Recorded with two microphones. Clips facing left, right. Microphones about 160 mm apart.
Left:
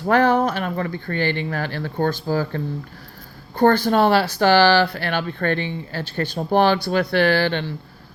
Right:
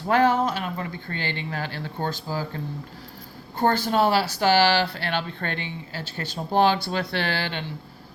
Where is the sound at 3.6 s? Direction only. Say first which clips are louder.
Left 5 dB; 60° left (ahead or behind).